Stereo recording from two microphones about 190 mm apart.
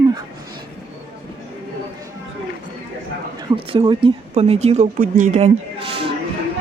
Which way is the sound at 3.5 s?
25° right (ahead or behind).